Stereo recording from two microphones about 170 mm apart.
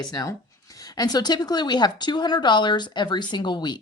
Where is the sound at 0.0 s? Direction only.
20° left (ahead or behind).